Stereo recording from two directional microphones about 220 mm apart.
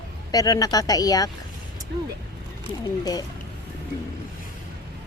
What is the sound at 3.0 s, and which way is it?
Speech, 15° left (ahead or behind).